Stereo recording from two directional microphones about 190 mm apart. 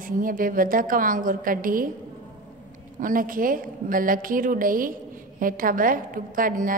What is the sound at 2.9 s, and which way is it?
A woman's voice, 45° right (ahead or behind).